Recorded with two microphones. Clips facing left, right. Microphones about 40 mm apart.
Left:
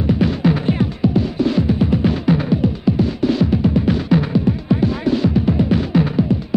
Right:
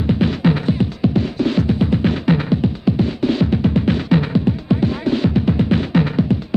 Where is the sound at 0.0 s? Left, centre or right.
Right.